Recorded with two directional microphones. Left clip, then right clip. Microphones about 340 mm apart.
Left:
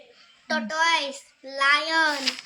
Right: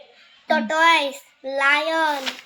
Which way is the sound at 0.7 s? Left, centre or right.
Right.